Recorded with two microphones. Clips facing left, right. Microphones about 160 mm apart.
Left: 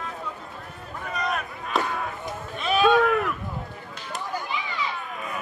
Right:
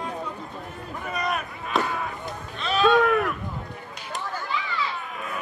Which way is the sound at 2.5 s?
10° left (ahead or behind).